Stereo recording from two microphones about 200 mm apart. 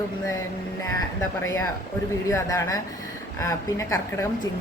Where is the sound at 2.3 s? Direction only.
15° left (ahead or behind).